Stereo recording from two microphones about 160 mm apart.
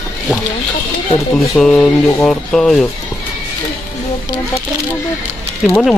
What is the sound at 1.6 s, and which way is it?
Speech, 5° left (ahead or behind).